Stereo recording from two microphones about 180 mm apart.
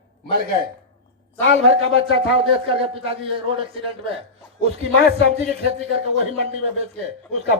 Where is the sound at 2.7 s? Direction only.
30° right (ahead or behind).